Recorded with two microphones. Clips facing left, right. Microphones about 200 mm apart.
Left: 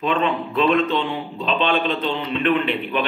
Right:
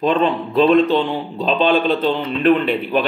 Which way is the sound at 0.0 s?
35° right (ahead or behind).